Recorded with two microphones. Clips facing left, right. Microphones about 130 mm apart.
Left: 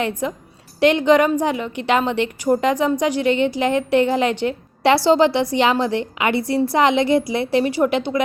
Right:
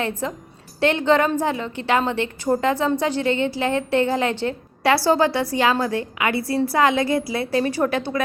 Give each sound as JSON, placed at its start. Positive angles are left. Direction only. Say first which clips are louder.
{"t": 0.0, "sound": "a woman's voice", "louder": "left 3 dB", "side_deg": 15}